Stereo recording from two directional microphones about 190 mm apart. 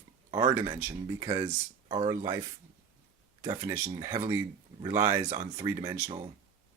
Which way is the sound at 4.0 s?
15° right (ahead or behind).